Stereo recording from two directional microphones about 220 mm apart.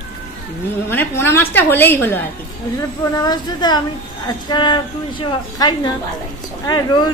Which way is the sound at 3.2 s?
20° left (ahead or behind).